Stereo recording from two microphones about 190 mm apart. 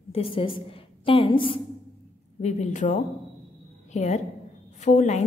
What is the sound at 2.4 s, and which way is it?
A woman's voice, 35° left (ahead or behind).